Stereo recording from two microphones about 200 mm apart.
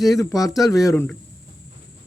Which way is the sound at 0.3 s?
15° left (ahead or behind).